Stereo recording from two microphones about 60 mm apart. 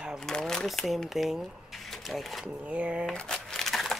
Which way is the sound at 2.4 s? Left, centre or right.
Centre.